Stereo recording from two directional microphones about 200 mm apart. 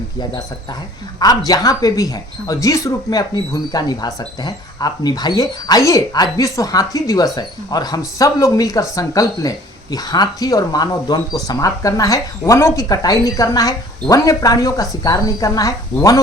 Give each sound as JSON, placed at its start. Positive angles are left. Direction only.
{"t": 0.2, "sound": "speech", "side_deg": 20}